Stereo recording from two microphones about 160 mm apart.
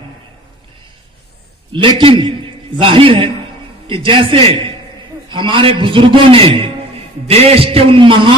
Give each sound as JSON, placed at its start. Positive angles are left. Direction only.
{"t": 2.0, "sound": "a man's voice", "side_deg": -30}